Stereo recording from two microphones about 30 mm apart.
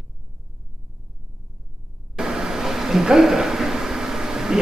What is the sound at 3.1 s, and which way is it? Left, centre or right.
Speech, centre.